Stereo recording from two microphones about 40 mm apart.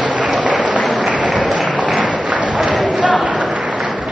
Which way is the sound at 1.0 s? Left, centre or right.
Right.